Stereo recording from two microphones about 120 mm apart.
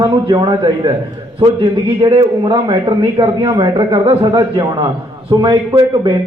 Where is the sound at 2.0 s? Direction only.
45° right (ahead or behind).